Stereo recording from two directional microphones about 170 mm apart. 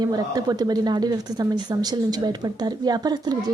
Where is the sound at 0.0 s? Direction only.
20° right (ahead or behind).